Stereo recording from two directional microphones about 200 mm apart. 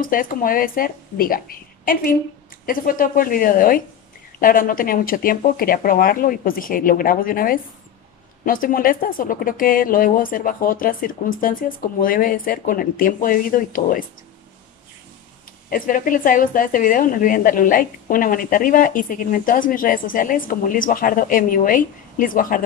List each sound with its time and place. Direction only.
0.0 s a woman's voice: 45° left (ahead or behind)
15.7 s a woman's voice: 45° left (ahead or behind)